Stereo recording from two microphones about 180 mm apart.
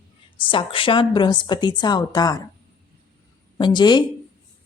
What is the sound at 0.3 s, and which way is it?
A woman's voice, 30° left (ahead or behind).